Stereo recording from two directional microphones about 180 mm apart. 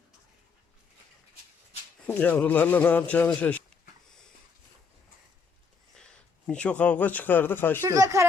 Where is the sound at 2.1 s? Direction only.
10° left (ahead or behind).